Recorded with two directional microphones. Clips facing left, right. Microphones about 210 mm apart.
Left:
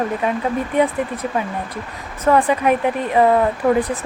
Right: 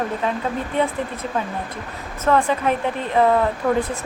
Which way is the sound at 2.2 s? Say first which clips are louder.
Left 3 dB; 10° left (ahead or behind).